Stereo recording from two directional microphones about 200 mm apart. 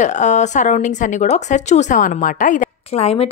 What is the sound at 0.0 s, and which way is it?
A woman's voice, 35° left (ahead or behind).